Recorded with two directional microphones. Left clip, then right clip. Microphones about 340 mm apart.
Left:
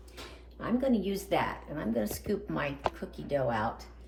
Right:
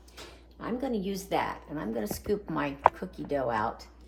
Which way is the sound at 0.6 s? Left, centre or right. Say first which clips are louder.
Left 2 dB; centre.